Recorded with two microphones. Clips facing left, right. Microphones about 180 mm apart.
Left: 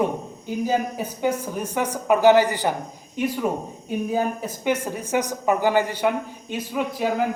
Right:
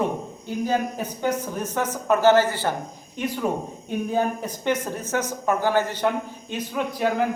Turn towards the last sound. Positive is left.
turn(degrees=5)  # may be behind; listen again after turning